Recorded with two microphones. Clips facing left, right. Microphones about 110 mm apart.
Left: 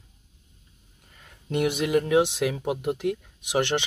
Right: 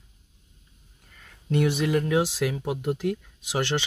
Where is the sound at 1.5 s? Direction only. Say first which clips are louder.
Even; 15° left (ahead or behind).